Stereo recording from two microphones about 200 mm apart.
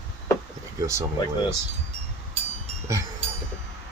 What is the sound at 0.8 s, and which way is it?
Speech, 15° right (ahead or behind).